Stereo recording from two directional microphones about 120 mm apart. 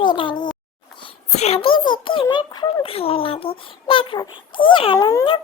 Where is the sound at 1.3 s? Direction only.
60° left (ahead or behind); by 4.9 s 45° left (ahead or behind).